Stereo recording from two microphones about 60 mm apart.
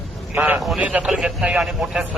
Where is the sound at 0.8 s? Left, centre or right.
Centre.